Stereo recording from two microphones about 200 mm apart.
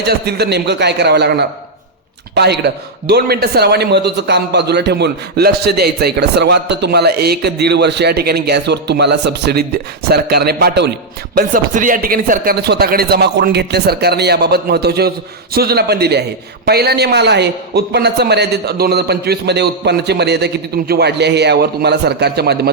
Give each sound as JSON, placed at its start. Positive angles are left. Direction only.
{"t": 0.0, "sound": "a man's voice", "side_deg": -55}